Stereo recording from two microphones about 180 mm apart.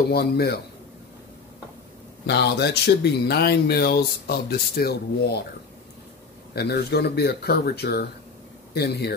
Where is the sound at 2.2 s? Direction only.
70° left (ahead or behind).